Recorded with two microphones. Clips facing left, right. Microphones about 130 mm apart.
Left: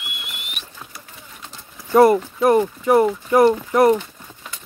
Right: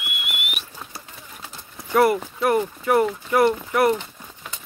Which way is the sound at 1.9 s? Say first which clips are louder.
Left 5 dB; 25° left (ahead or behind).